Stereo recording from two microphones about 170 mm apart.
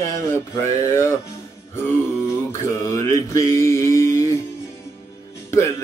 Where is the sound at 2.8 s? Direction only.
20° left (ahead or behind).